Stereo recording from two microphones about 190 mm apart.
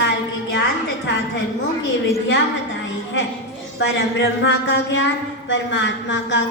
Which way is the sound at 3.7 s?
70° left (ahead or behind).